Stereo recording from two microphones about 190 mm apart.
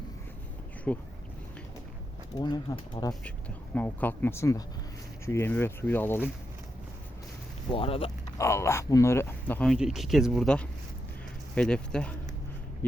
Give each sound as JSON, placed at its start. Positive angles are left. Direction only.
{"t": 0.9, "sound": "speech", "side_deg": 10}
{"t": 2.4, "sound": "speech", "side_deg": 20}
{"t": 3.8, "sound": "speech", "side_deg": 10}
{"t": 7.7, "sound": "speech", "side_deg": 30}
{"t": 8.4, "sound": "speech", "side_deg": 15}